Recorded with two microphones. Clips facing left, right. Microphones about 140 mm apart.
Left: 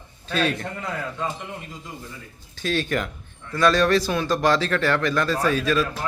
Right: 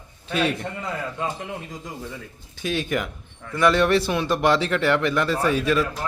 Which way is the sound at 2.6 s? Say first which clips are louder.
Left 1 dB; 15° right (ahead or behind).